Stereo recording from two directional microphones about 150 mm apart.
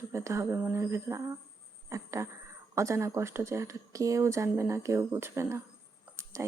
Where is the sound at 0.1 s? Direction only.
20° right (ahead or behind).